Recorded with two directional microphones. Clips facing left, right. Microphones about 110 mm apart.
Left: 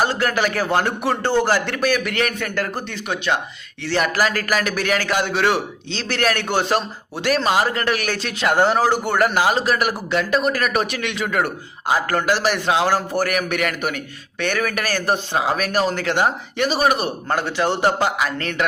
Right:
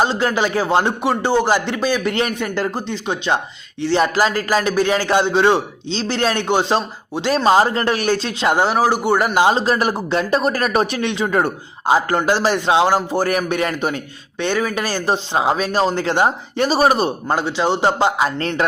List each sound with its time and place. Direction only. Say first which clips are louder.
0.0 s a man's voice: right 2 dB; 20° right (ahead or behind)
8.5 s a man's voice: left 1 dB; 10° right (ahead or behind); by 17.1 s 35° right (ahead or behind)
17.2 s a man's voice: left 1 dB; 20° right (ahead or behind)